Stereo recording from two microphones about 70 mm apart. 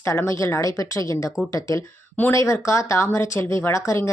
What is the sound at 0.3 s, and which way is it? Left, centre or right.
A woman's voice, left.